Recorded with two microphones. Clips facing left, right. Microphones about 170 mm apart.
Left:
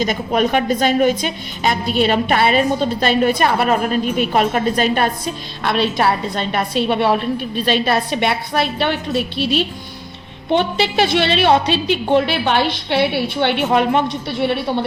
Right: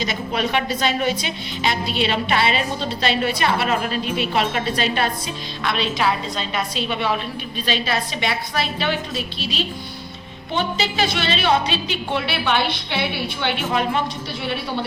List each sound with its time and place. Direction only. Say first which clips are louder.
0.0 s a woman's voice: left 6 dB; 45° left (ahead or behind)